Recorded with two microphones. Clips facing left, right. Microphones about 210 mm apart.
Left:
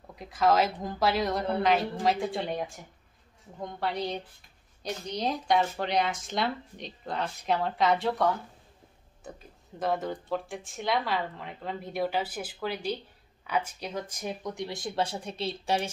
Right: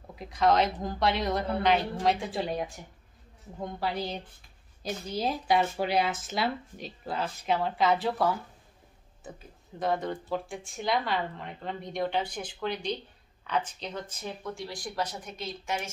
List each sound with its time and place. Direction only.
0.1 s speech: centre (ahead or behind); by 15.9 s 35° left (ahead or behind)